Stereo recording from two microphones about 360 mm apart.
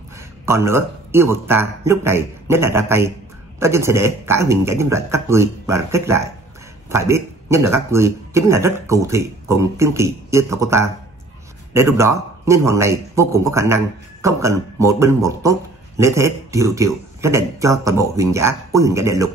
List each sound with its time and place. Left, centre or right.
0.5 s a man's voice: centre